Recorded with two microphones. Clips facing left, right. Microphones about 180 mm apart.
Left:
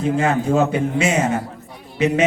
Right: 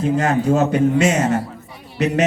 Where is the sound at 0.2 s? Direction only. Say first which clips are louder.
Even; 40° right (ahead or behind).